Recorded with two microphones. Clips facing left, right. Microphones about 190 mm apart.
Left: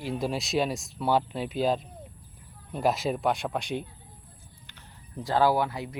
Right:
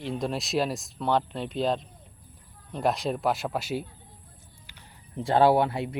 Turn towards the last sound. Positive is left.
turn(degrees=-25)  # may be behind; listen again after turning